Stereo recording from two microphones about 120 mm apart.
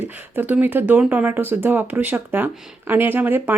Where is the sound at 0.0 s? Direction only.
15° right (ahead or behind).